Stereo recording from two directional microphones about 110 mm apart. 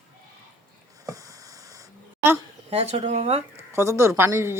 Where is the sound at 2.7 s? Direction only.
70° right (ahead or behind).